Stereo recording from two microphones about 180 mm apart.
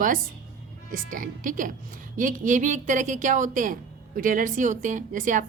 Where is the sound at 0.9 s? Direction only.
45° right (ahead or behind).